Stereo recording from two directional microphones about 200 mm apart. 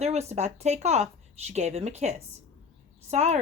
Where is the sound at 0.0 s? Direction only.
35° right (ahead or behind).